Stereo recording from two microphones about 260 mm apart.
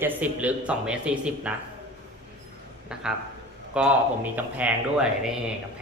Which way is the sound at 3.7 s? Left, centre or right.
Centre.